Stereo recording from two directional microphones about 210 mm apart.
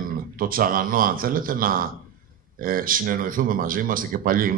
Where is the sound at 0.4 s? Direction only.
45° right (ahead or behind).